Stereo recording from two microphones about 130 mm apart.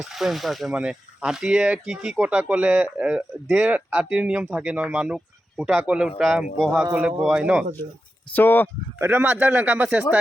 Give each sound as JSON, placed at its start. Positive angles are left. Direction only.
{"t": 0.0, "sound": "a man's voice", "side_deg": 0}
{"t": 8.3, "sound": "speech", "side_deg": 15}
{"t": 9.0, "sound": "a man's voice", "side_deg": -15}